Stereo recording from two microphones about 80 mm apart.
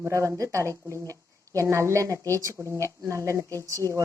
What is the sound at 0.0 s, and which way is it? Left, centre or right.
A woman's voice, right.